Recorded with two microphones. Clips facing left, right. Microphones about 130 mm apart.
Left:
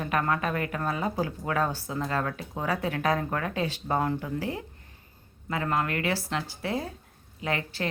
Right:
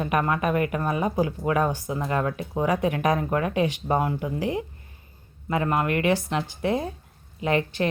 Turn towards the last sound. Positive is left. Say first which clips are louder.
# right 7 dB
turn(degrees=-20)  # may be behind; listen again after turning